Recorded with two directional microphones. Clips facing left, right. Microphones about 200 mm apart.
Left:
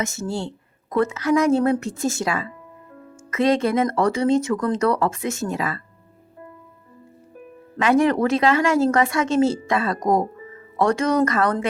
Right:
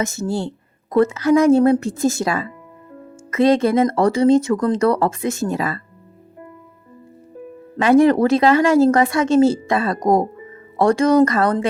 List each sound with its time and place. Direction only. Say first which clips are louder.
0.0 s a woman's voice: right 4 dB; 35° right (ahead or behind)
7.8 s a woman's voice: right 5 dB; 35° right (ahead or behind)